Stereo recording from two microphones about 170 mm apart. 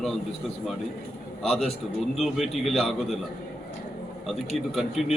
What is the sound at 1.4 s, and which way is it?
A man's voice, centre (ahead or behind).